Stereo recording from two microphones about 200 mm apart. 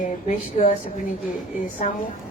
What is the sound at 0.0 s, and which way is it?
Speech, 40° left (ahead or behind).